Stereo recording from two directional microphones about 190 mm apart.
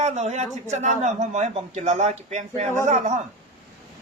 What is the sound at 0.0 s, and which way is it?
A man's voice, 35° right (ahead or behind).